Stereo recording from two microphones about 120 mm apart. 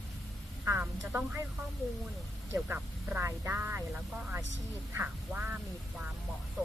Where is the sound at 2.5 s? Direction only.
15° right (ahead or behind).